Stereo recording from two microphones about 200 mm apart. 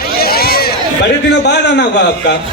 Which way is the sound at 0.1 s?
50° left (ahead or behind).